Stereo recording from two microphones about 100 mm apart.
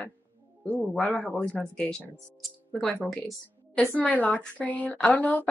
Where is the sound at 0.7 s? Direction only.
15° left (ahead or behind).